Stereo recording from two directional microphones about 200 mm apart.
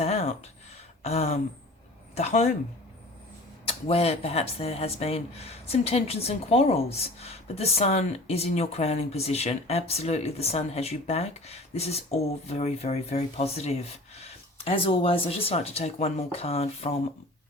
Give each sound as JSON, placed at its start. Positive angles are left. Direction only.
{"t": 0.0, "sound": "a sound", "side_deg": 35}
{"t": 1.0, "sound": "speech", "side_deg": 30}
{"t": 3.8, "sound": "speech", "side_deg": 30}